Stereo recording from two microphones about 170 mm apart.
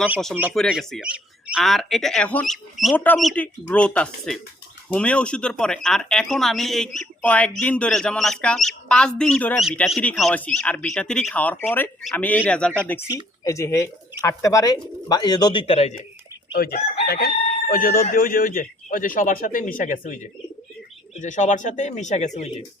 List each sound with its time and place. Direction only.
0.5 s speech: centre (ahead or behind)
13.4 s speech: 15° left (ahead or behind); by 16.0 s 40° left (ahead or behind)
16.6 s chicken: 60° left (ahead or behind)
18.1 s a man's voice: 60° left (ahead or behind)
21.2 s a man's voice: 45° left (ahead or behind)